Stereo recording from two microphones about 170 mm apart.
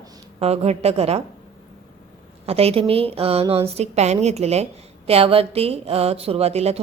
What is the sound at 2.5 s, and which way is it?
A woman's voice, 35° right (ahead or behind).